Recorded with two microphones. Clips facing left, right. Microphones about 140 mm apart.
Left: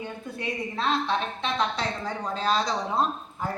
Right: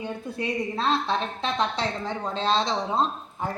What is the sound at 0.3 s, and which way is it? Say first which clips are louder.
A woman's voice: right 3 dB; 35° right (ahead or behind).